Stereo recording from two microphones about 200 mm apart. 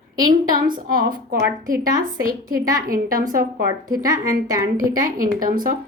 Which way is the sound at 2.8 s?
45° right (ahead or behind).